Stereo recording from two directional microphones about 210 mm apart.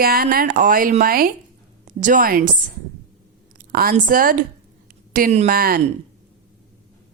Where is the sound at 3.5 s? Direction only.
45° right (ahead or behind).